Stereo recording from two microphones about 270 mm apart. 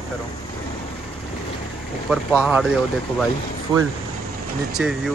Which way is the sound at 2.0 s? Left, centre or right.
Centre.